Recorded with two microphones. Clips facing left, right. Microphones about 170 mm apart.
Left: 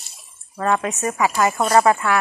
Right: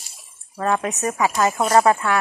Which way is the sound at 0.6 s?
15° right (ahead or behind).